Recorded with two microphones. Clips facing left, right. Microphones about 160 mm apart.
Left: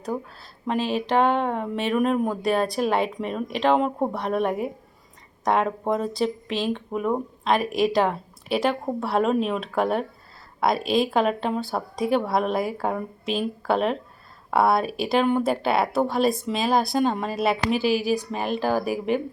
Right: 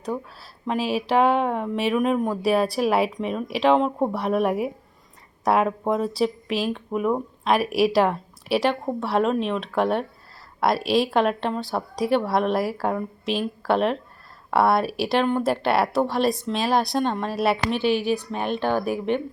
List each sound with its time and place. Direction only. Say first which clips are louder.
0.7 s speech: right 1 dB; 5° right (ahead or behind)